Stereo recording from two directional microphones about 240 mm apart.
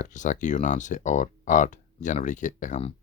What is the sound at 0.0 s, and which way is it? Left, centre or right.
Speech, left.